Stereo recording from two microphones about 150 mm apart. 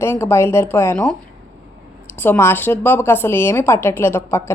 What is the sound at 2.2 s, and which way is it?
A woman's voice, 15° left (ahead or behind).